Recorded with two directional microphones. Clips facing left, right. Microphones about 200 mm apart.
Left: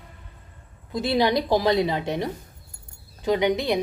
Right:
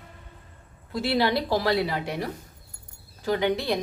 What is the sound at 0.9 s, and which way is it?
Speech, 20° left (ahead or behind).